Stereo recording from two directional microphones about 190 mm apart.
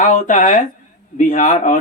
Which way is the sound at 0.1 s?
40° left (ahead or behind).